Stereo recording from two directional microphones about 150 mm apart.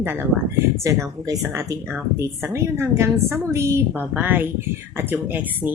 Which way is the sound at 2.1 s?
20° right (ahead or behind).